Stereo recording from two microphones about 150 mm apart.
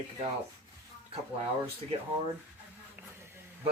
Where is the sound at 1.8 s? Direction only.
40° right (ahead or behind).